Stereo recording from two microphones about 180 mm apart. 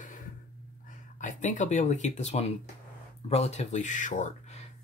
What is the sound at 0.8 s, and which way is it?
Speech, 45° left (ahead or behind).